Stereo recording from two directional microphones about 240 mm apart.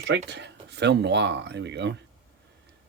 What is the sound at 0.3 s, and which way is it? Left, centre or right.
Speech, right.